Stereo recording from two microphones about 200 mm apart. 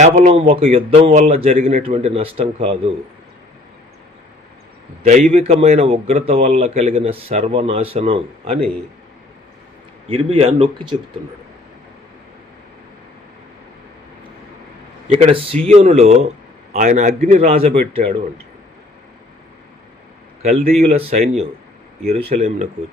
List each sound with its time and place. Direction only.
0.0 s speech: 35° right (ahead or behind)
5.3 s speech: 30° right (ahead or behind)
10.1 s speech: 30° right (ahead or behind)
15.0 s speech: 35° right (ahead or behind)
20.4 s speech: 40° right (ahead or behind)
20.8 s speech: 30° right (ahead or behind)